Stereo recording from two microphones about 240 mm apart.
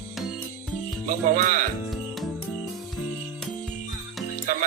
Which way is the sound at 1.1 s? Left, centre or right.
Right.